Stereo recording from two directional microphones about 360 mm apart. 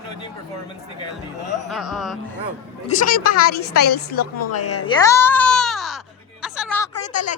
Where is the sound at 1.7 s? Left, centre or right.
Centre.